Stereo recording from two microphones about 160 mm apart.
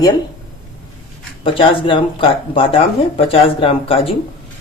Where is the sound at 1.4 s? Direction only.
30° left (ahead or behind).